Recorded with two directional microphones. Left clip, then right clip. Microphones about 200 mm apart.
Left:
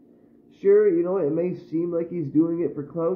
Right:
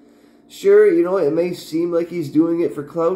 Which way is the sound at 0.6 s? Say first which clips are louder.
Right 6 dB; 10° right (ahead or behind).